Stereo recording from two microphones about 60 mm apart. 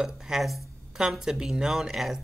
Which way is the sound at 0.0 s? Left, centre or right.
Centre.